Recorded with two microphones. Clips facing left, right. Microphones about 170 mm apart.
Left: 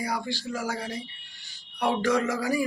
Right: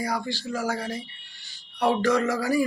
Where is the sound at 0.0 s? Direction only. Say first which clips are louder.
Right 2 dB; 10° left (ahead or behind).